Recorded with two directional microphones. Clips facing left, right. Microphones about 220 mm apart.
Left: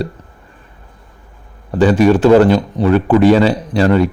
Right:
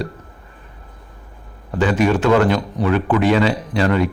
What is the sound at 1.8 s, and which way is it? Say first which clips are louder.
A man's voice: left 6 dB; 35° left (ahead or behind).